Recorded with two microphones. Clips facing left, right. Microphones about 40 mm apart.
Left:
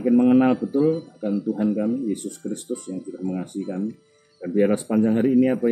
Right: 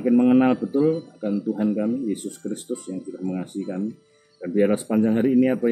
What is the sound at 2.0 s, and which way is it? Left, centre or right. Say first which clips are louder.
Speech: even; centre.